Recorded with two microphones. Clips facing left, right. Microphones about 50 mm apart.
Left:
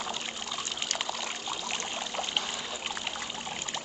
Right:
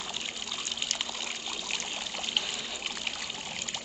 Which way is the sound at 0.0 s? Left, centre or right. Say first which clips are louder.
Left 2 dB; left.